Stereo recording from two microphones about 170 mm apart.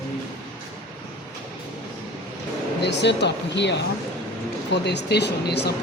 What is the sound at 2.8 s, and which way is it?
Speech, 90° left.